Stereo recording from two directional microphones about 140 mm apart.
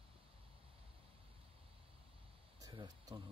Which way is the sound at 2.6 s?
30° right (ahead or behind).